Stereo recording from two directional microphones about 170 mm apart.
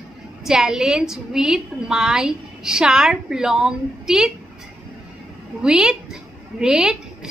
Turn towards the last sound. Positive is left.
turn(degrees=-5)  # may be behind; listen again after turning